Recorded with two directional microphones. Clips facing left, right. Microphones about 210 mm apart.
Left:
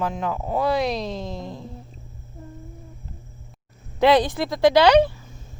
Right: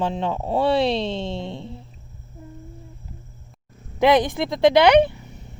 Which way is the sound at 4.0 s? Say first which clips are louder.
Even; 20° right (ahead or behind).